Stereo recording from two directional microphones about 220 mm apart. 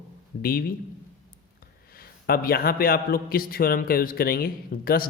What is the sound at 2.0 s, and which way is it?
A man's voice, 40° left (ahead or behind).